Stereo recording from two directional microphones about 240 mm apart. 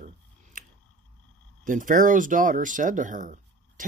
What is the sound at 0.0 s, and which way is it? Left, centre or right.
Scissors, right.